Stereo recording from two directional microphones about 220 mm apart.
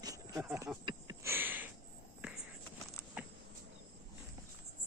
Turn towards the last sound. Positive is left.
turn(degrees=-5)  # may be behind; listen again after turning